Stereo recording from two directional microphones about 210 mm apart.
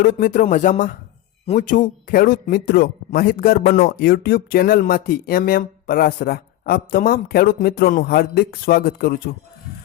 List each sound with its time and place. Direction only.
0.0 s a man's voice: 40° left (ahead or behind)